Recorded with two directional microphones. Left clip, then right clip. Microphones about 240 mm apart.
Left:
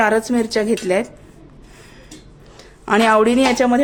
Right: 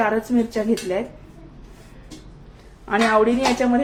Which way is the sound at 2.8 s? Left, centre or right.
Left.